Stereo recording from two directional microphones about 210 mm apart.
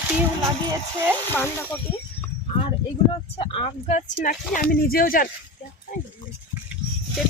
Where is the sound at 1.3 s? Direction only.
10° left (ahead or behind).